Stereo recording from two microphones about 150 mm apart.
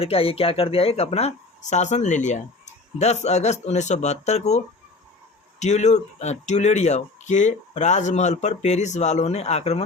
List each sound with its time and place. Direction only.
0.0 s speech: 40° left (ahead or behind)